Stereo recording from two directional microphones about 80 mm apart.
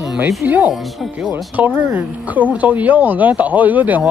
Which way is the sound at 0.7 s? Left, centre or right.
Centre.